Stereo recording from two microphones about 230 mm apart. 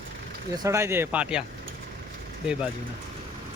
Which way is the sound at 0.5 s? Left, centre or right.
Centre.